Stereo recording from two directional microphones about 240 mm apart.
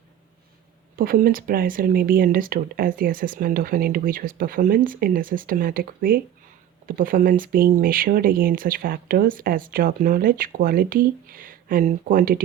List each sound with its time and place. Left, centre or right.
0.9 s speech: right